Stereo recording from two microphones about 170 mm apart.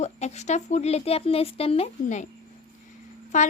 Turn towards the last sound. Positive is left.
turn(degrees=45)  # may be behind; listen again after turning